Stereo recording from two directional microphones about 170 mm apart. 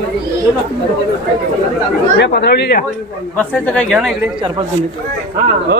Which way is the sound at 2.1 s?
80° left.